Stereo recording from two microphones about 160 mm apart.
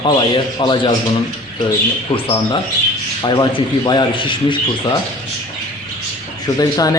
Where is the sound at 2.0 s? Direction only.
35° left (ahead or behind).